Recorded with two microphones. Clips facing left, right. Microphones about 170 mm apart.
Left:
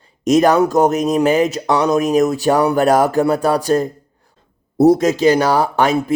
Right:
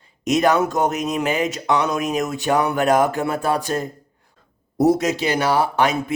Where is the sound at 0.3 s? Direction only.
35° left (ahead or behind).